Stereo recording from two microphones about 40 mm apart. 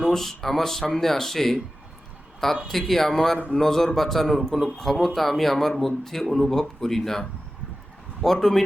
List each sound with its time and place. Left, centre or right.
0.1 s speech: centre
2.6 s a man's voice: centre